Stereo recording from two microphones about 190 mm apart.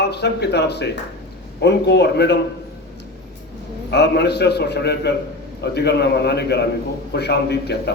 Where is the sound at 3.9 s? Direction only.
60° left (ahead or behind).